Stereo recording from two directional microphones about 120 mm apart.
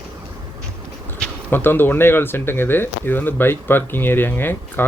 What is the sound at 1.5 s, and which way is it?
Speech, 20° left (ahead or behind).